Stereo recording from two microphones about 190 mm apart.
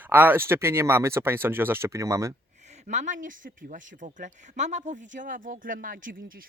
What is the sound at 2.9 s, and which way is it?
Speech, 40° right (ahead or behind).